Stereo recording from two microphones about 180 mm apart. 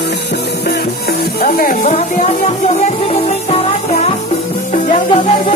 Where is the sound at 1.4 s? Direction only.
55° left (ahead or behind).